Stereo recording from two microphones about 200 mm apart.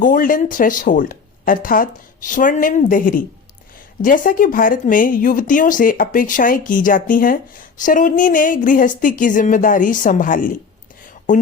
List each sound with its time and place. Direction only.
0.0 s speech: 40° left (ahead or behind)